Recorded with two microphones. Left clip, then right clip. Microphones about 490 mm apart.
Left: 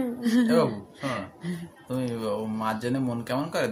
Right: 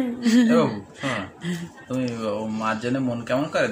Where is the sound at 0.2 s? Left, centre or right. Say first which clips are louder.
Right 4 dB; left.